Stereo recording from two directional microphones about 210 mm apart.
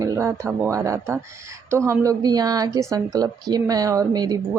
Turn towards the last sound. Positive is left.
turn(degrees=-20)  # may be behind; listen again after turning